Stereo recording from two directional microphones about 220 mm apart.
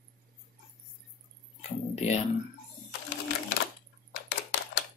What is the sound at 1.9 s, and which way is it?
Speech, 30° left (ahead or behind).